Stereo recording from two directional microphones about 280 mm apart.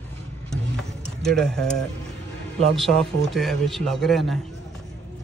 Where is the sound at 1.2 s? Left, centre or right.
Centre.